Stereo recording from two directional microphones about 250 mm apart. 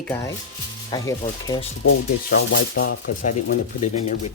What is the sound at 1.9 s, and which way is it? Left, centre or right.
Speech, left.